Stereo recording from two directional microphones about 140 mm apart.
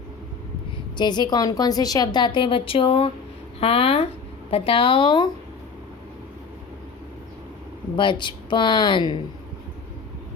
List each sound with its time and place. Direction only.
0.9 s a woman's voice: 30° left (ahead or behind)
7.9 s a woman's voice: 35° left (ahead or behind)